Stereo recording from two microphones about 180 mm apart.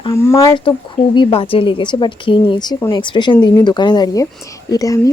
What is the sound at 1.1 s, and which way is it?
Speech, 30° left (ahead or behind).